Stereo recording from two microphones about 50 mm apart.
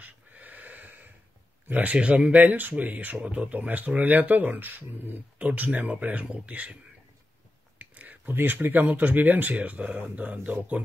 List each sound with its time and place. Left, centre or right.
0.0 s snort: right
1.7 s speech: right
2.3 s speech: right
7.8 s speech: right